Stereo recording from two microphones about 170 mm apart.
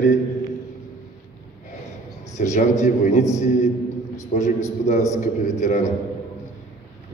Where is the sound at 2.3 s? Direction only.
45° left (ahead or behind).